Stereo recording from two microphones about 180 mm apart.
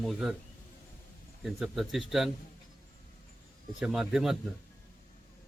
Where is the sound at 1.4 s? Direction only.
Centre (ahead or behind).